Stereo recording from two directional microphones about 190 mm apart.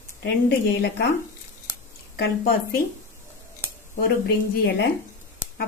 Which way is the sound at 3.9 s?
55° left (ahead or behind).